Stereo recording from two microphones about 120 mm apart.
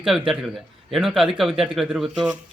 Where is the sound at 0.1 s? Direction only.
5° right (ahead or behind).